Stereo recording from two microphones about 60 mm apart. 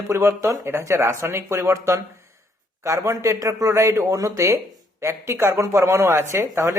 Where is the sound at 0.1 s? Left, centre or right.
Right.